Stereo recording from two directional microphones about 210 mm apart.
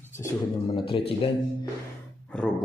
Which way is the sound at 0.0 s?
10° left (ahead or behind).